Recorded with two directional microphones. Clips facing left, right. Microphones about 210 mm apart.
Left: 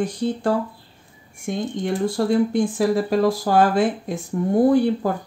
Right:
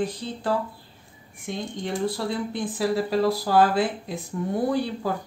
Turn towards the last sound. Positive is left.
turn(degrees=50)  # may be behind; listen again after turning